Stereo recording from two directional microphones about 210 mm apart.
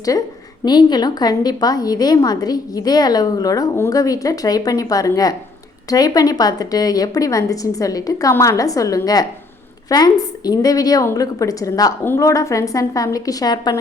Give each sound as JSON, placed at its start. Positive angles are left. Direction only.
{"t": 0.6, "sound": "a woman's voice", "side_deg": 20}